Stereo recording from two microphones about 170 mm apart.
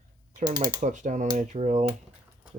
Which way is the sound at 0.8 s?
45° right (ahead or behind).